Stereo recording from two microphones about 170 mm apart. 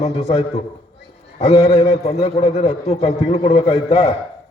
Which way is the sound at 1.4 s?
35° left (ahead or behind).